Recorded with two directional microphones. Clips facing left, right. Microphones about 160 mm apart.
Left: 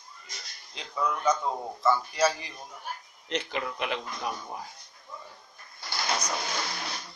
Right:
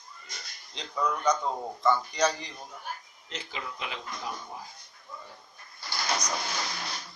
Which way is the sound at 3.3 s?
65° left (ahead or behind).